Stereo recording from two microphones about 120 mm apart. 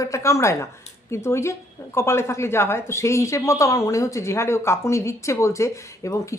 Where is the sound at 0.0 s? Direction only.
25° left (ahead or behind).